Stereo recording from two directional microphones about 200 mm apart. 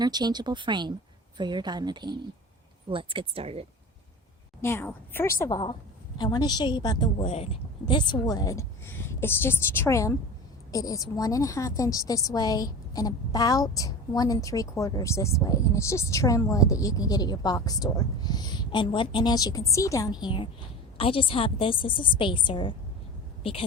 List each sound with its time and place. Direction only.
0.0 s speech: 20° right (ahead or behind)
4.6 s a woman's voice: 10° left (ahead or behind); by 23.6 s 30° left (ahead or behind)